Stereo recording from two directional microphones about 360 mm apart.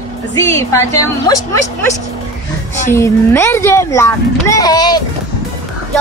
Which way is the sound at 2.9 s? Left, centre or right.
Centre.